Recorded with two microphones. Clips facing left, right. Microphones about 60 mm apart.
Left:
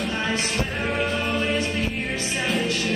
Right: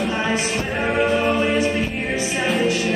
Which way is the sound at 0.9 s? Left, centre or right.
Centre.